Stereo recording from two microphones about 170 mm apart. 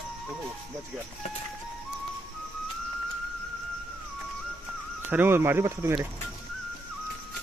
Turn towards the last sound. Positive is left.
turn(degrees=-15)  # may be behind; listen again after turning